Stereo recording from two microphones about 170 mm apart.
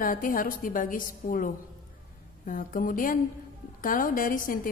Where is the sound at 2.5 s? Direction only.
55° left (ahead or behind).